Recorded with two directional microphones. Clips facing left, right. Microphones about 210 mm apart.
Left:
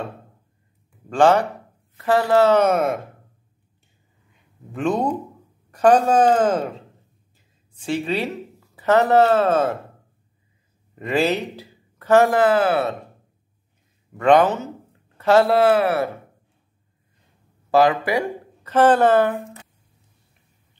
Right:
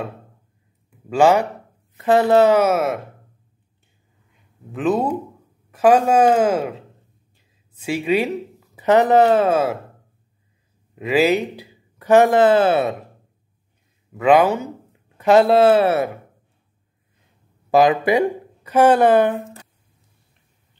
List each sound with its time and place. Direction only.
1.0 s a woman's voice: 10° right (ahead or behind)
2.0 s speech: 20° right (ahead or behind)
2.5 s speech: 5° right (ahead or behind)
4.7 s a woman's voice: 5° right (ahead or behind)
11.0 s speech: 5° right (ahead or behind); by 12.9 s 25° right (ahead or behind)
14.1 s speech: 5° right (ahead or behind); by 16.1 s 25° right (ahead or behind)
17.6 s a woman's voice: 15° right (ahead or behind)